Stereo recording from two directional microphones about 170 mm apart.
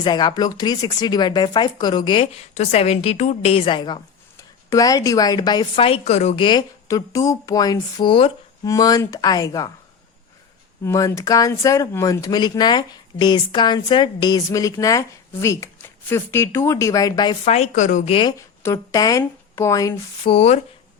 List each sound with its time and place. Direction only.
0.0 s speech: 25° left (ahead or behind)
6.4 s speech: 25° left (ahead or behind)
10.8 s speech: 20° left (ahead or behind)
17.4 s speech: 40° left (ahead or behind)
18.1 s speech: 25° left (ahead or behind)
20.3 s speech: 40° left (ahead or behind)